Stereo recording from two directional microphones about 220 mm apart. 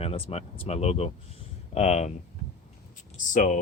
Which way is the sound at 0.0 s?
25° left (ahead or behind).